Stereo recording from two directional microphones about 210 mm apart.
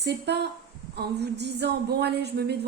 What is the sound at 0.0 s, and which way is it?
Speech, 55° right (ahead or behind).